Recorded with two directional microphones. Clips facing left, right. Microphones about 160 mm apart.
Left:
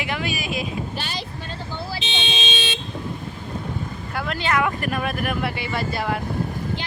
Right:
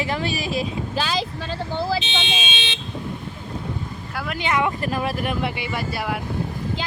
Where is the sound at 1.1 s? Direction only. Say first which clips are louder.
Right 6 dB; 90° right.